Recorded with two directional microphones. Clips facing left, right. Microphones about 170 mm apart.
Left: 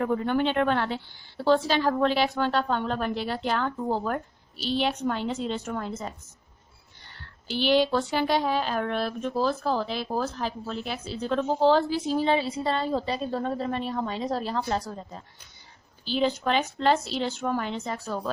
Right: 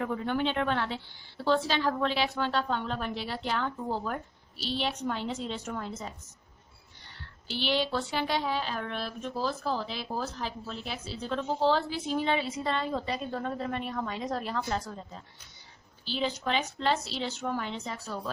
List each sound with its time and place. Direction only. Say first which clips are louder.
0.0 s a woman's voice: left 5 dB; 45° left (ahead or behind)
7.6 s speech: left 7 dB; 45° left (ahead or behind)
16.0 s speech: left 6 dB; 55° left (ahead or behind)